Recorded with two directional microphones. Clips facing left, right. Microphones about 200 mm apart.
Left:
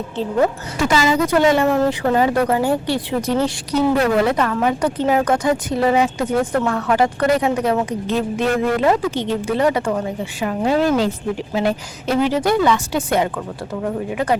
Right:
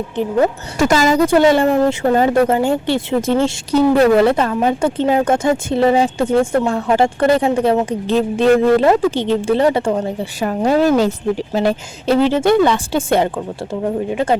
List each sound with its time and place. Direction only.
0.8 s speech: 45° right (ahead or behind)
1.2 s a woman's voice: 30° right (ahead or behind)
10.4 s a woman's voice: 40° right (ahead or behind)